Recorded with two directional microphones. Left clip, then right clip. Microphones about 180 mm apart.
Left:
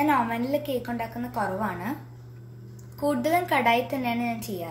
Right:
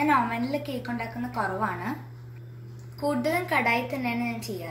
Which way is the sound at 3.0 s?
40° left (ahead or behind).